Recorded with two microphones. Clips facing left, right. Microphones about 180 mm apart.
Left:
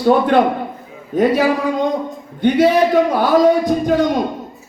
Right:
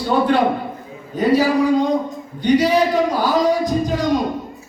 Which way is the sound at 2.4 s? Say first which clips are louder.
Left 2 dB; 55° left (ahead or behind).